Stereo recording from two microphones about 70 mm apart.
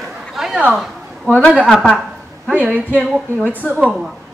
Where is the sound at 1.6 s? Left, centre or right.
Centre.